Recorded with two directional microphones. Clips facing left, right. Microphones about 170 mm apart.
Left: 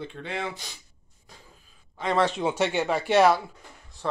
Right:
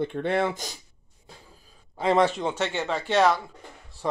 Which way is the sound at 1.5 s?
35° right (ahead or behind).